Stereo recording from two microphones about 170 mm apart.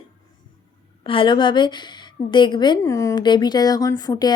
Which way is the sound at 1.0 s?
30° left (ahead or behind).